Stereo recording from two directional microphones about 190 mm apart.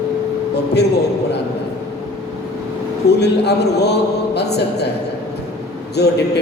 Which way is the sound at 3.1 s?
60° left (ahead or behind).